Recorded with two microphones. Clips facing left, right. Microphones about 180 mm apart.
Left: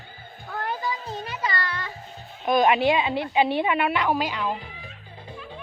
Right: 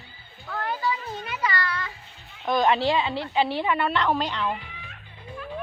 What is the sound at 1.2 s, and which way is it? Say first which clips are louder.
Music: right 2 dB; 35° left (ahead or behind).